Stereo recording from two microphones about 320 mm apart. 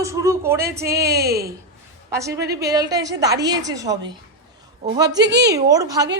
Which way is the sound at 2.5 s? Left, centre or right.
Centre.